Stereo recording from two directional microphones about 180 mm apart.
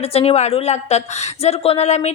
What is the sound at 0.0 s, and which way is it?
A woman's voice, 35° left (ahead or behind).